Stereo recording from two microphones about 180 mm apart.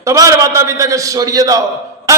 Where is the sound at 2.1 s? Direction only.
20° right (ahead or behind).